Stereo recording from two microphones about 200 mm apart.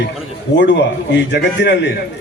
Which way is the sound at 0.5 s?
60° left (ahead or behind).